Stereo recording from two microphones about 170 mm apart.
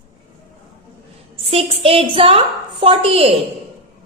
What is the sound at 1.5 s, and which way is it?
A woman's voice, 35° right (ahead or behind).